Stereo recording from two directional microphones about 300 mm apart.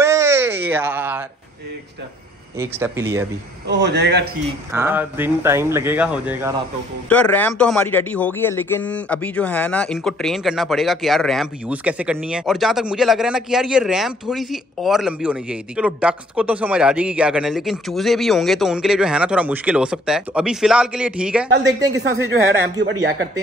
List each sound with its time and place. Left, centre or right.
0.0 s a sound: centre
2.6 s speech: centre
3.6 s speech: right
4.7 s speech: centre
21.5 s speech: right